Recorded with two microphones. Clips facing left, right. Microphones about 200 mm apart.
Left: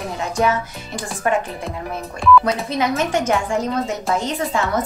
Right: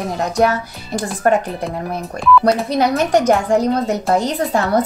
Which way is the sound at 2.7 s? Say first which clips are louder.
Right 4 dB; 35° right (ahead or behind).